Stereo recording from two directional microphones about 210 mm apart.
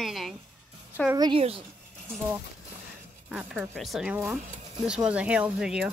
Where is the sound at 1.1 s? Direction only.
20° right (ahead or behind).